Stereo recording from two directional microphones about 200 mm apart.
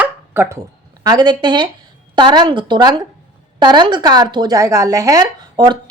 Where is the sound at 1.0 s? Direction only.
20° right (ahead or behind).